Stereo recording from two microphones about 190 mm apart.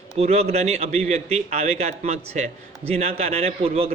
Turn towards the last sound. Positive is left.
turn(degrees=-35)  # may be behind; listen again after turning